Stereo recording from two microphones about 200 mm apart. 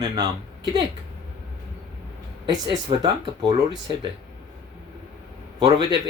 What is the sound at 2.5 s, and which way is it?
Speech, 20° right (ahead or behind).